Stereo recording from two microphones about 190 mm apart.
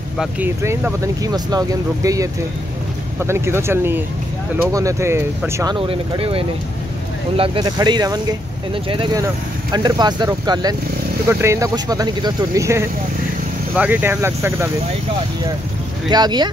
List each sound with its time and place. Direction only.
0.2 s speech: 10° right (ahead or behind)
5.8 s speech: 30° right (ahead or behind); by 14.7 s 15° right (ahead or behind)
16.1 s speech: 20° right (ahead or behind)